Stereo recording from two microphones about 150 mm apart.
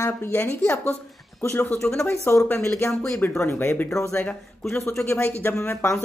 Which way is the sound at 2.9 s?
5° left (ahead or behind).